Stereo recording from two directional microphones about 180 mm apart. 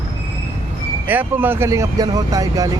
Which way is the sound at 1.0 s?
10° right (ahead or behind).